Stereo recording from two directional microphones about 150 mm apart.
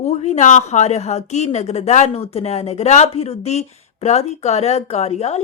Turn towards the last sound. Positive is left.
turn(degrees=45)  # may be behind; listen again after turning